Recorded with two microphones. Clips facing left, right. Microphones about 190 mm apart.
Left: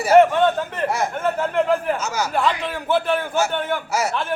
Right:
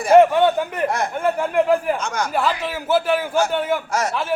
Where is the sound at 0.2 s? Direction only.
15° right (ahead or behind).